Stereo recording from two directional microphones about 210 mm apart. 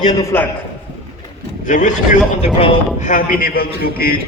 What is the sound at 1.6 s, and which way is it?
A man's voice, 35° left (ahead or behind).